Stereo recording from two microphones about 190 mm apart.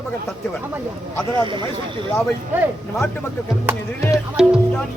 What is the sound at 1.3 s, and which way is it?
Speech, 25° right (ahead or behind).